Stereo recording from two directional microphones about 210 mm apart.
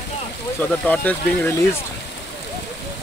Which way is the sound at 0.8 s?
10° left (ahead or behind).